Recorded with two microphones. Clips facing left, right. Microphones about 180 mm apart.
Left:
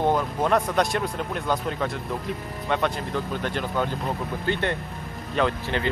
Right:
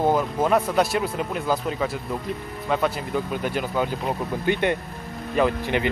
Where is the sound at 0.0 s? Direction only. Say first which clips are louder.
Right 2 dB; 5° right (ahead or behind).